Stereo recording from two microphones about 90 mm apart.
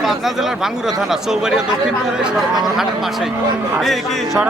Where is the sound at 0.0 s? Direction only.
Centre (ahead or behind).